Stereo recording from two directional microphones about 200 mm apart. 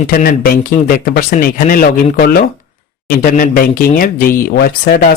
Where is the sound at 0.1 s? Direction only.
50° left (ahead or behind).